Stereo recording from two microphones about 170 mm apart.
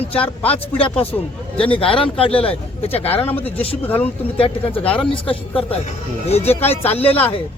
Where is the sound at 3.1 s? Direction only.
10° left (ahead or behind).